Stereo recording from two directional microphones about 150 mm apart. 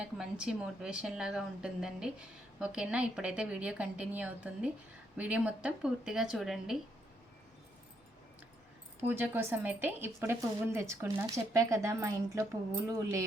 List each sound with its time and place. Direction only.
0.0 s a woman's voice: 5° right (ahead or behind)
9.0 s a woman's voice: 15° right (ahead or behind)